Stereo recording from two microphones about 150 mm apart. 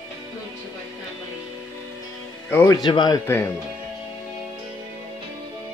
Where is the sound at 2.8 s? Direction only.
30° left (ahead or behind).